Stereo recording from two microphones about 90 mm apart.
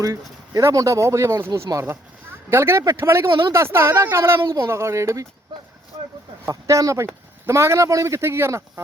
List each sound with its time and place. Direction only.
0.0 s speech: 35° right (ahead or behind)
6.5 s speech: 40° right (ahead or behind)